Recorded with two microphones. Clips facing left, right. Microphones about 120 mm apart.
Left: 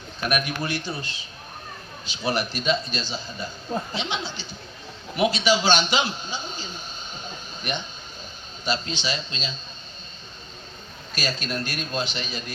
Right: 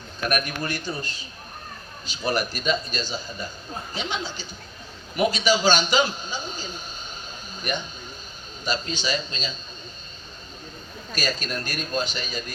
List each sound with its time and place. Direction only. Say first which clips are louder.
0.3 s a man's voice: left 1 dB; 45° right (ahead or behind)
7.3 s a sound: right 2 dB; 45° right (ahead or behind)
8.6 s a man's voice: even; 45° right (ahead or behind)
11.1 s a man's voice: even; 45° right (ahead or behind)